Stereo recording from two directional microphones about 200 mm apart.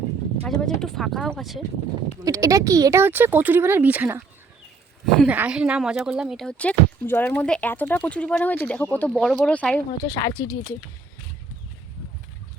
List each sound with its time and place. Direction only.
0.4 s speech: 5° left (ahead or behind)
2.2 s speech: 15° right (ahead or behind); by 9.8 s 5° left (ahead or behind)
10.1 s speech: 20° left (ahead or behind)